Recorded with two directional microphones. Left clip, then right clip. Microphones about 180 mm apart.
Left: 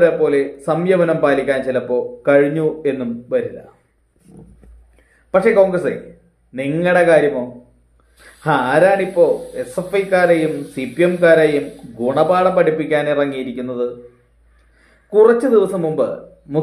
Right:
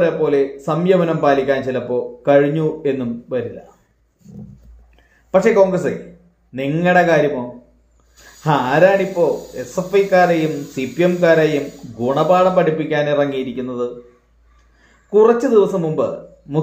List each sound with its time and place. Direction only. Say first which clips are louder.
0.0 s a man's voice: left 2 dB; 20° right (ahead or behind)
5.3 s a man's voice: even; 20° right (ahead or behind)
8.5 s a man's voice: even; 20° right (ahead or behind)
15.0 s speech: left 1 dB; 20° right (ahead or behind)